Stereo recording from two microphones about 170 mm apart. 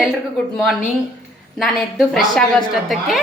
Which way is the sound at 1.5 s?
Centre (ahead or behind).